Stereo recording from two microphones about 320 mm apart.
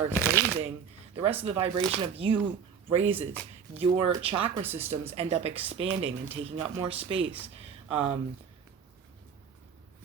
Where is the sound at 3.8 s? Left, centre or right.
Centre.